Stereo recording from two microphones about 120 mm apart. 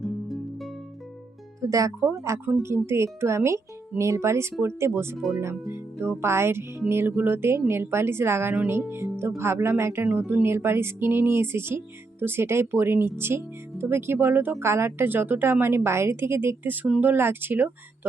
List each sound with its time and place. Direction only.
0.0 s music: centre (ahead or behind)
1.6 s speech: 30° right (ahead or behind)